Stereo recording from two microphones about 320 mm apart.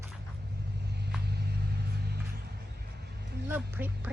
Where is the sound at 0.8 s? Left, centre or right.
Right.